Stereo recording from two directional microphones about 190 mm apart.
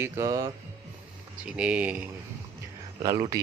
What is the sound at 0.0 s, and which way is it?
Speech, 15° right (ahead or behind).